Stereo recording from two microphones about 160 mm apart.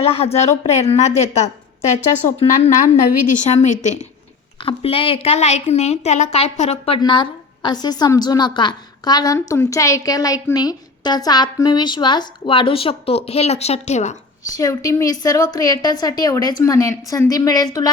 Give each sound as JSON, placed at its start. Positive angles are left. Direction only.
{"t": 0.0, "sound": "a woman's voice", "side_deg": 40}
{"t": 2.4, "sound": "a woman's voice", "side_deg": 40}
{"t": 4.6, "sound": "a woman's voice", "side_deg": 35}
{"t": 7.0, "sound": "a woman's voice", "side_deg": 30}
{"t": 14.5, "sound": "a woman's voice", "side_deg": 20}